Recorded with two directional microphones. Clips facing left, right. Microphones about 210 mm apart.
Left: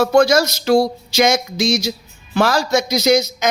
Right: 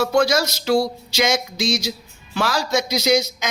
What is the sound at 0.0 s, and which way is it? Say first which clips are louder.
Speech: left 5 dB; 45° left (ahead or behind).